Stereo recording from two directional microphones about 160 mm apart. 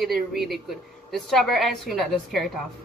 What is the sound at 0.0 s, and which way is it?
A woman's voice, centre (ahead or behind).